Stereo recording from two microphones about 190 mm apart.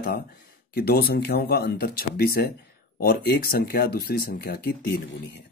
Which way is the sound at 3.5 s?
50° left (ahead or behind).